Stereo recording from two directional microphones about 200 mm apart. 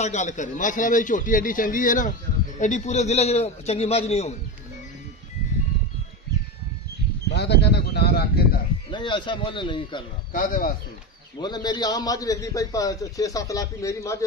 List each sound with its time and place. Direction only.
0.0 s a man's voice: 35° left (ahead or behind)
7.2 s speech: 60° left (ahead or behind)
8.9 s speech: 25° left (ahead or behind)
10.3 s speech: 45° left (ahead or behind)
11.4 s a man's voice: 20° left (ahead or behind)